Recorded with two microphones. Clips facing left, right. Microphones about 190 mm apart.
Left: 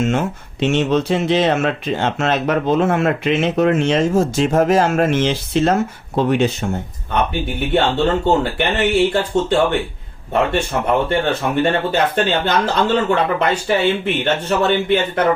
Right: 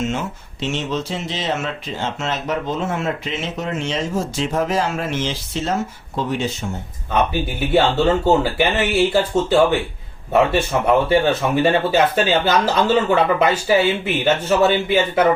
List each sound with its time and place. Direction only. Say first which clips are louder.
0.1 s speech: left 5 dB; 60° left (ahead or behind)
7.1 s speech: even; centre (ahead or behind)